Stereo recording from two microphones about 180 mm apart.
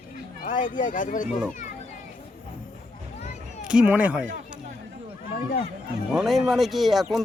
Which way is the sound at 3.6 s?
5° right (ahead or behind).